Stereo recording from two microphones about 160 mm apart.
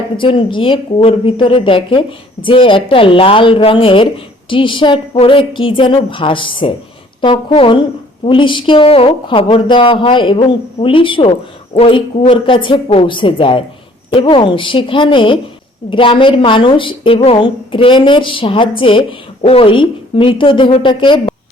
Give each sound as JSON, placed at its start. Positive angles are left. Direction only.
{"t": 0.2, "sound": "a woman's voice", "side_deg": 30}